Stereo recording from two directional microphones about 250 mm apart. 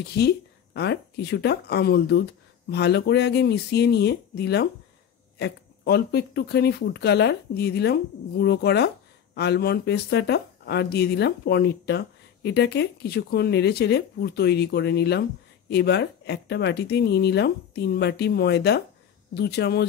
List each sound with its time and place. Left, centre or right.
0.2 s speech: left